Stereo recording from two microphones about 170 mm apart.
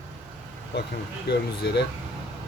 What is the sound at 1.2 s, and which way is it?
Speech, 80° left.